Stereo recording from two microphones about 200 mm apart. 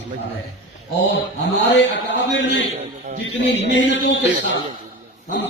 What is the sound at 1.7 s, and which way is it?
Speech, 60° left (ahead or behind).